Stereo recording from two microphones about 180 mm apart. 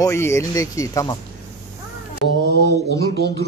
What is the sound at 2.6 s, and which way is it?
Speech, 65° left (ahead or behind).